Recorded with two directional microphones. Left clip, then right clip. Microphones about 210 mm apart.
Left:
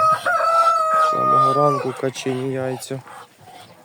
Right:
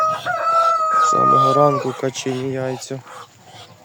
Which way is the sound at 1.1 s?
35° right (ahead or behind).